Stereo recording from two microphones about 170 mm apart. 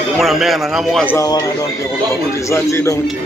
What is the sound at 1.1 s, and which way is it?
Speech, 20° left (ahead or behind).